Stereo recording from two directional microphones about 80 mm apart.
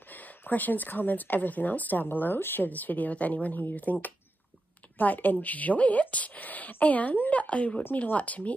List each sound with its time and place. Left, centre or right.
0.1 s speech: left